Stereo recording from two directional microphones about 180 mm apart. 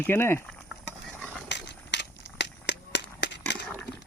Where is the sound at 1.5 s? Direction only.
75° left (ahead or behind).